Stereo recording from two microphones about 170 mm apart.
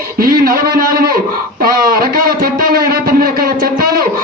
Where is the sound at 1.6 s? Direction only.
60° right (ahead or behind).